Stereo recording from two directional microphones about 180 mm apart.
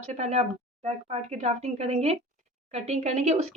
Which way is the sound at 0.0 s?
40° right (ahead or behind).